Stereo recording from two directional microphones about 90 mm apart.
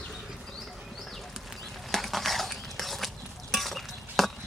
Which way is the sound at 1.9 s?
Centre (ahead or behind).